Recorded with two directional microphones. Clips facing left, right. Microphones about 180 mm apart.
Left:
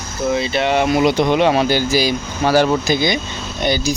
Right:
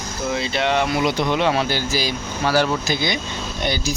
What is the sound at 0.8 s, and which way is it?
Speech, 20° left (ahead or behind).